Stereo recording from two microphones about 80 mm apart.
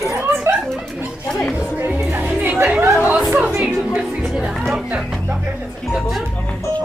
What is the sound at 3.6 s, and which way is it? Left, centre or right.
Music, centre.